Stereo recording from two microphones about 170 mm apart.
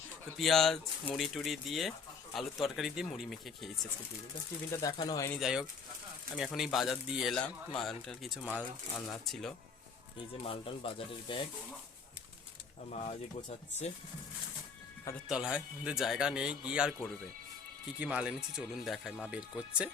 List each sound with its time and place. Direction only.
0.3 s speech: centre (ahead or behind)
4.7 s speech: 20° left (ahead or behind)
5.3 s speech: centre (ahead or behind)
10.4 s speech: 30° left (ahead or behind)
12.9 s speech: 40° left (ahead or behind)
15.3 s speech: 5° right (ahead or behind)
18.0 s speech: 5° right (ahead or behind)